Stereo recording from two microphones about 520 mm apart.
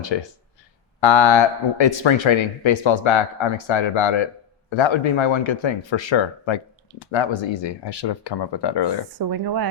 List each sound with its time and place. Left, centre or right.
0.1 s speech: left
9.1 s speech: right